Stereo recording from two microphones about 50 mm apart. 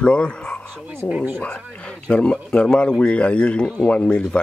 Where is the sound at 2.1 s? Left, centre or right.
Left.